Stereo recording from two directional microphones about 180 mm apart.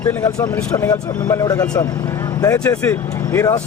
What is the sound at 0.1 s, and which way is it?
A man's voice, 10° left (ahead or behind).